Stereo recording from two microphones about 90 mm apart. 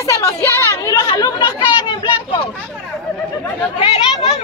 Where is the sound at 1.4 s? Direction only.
65° left (ahead or behind).